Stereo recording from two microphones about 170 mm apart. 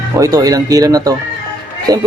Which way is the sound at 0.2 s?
20° right (ahead or behind).